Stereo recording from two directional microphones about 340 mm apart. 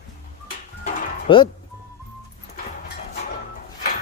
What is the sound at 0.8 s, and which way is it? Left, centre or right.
Music, centre.